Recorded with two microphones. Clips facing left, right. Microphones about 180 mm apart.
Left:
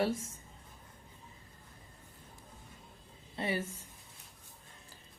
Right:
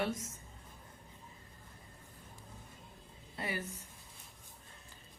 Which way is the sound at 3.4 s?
25° left (ahead or behind).